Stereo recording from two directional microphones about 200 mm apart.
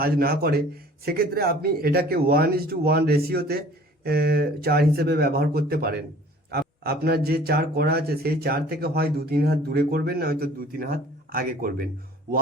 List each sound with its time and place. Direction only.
0.0 s a man's voice: 50° right (ahead or behind)